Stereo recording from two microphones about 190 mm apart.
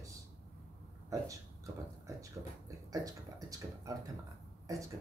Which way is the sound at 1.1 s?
15° right (ahead or behind).